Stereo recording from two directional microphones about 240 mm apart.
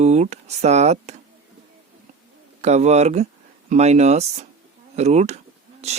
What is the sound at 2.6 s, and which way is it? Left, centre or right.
Speech, right.